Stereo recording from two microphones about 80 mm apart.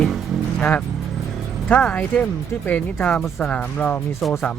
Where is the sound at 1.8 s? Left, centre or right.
Centre.